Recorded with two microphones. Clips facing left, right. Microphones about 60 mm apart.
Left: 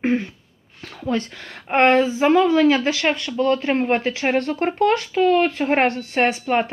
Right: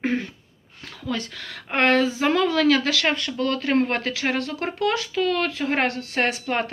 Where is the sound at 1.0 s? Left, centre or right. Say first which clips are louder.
Left 5 dB; left.